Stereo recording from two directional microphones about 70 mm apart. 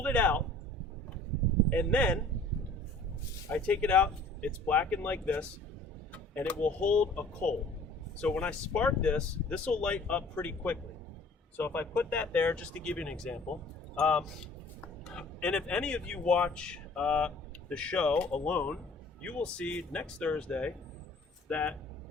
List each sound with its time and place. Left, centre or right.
0.0 s a man's voice: left
1.7 s speech: centre
3.5 s speech: left